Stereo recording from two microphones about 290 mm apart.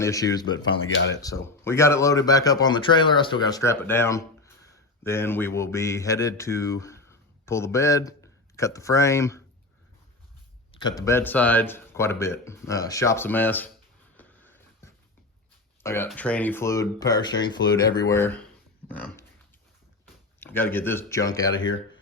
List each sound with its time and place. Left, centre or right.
0.0 s speech: centre
0.6 s speech: left
1.1 s speech: centre
10.7 s speech: centre
14.2 s a sound: centre
15.8 s speech: centre
20.4 s speech: centre